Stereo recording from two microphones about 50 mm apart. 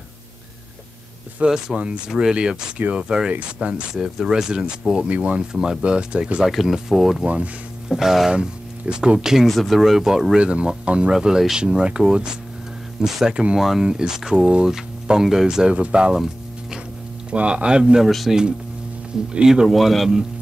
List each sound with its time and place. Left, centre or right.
1.4 s speech: centre
3.6 s speech: right
3.9 s speech: centre
6.4 s speech: centre
7.2 s speech: right
7.9 s speech: centre
8.3 s speech: centre
10.4 s speech: right
13.6 s speech: centre; by 16.2 s right
17.3 s speech: right
18.0 s speech: centre
19.3 s speech: centre
19.7 s speech: centre